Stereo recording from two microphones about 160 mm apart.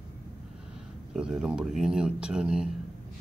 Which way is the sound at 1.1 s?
5° right (ahead or behind).